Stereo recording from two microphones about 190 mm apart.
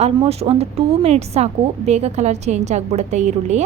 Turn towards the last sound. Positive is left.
turn(degrees=-40)  # may be behind; listen again after turning